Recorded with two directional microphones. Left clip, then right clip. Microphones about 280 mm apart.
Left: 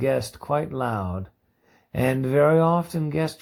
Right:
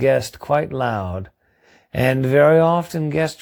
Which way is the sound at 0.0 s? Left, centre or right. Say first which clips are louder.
Right 7 dB; right.